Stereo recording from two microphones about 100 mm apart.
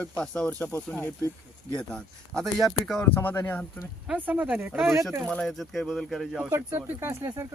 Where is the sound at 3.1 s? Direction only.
20° left (ahead or behind).